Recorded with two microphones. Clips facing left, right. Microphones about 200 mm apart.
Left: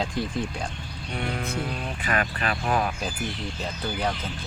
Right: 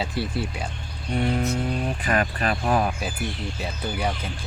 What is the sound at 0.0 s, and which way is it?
Speech, 5° right (ahead or behind).